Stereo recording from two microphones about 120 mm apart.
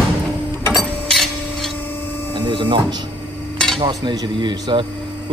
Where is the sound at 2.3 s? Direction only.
45° right (ahead or behind).